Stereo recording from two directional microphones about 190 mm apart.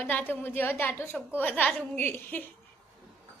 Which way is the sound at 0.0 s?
10° left (ahead or behind).